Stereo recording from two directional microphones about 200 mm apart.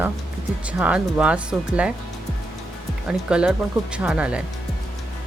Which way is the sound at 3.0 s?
5° right (ahead or behind).